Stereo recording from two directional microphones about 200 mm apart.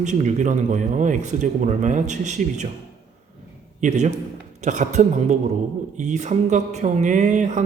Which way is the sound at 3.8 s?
35° right (ahead or behind).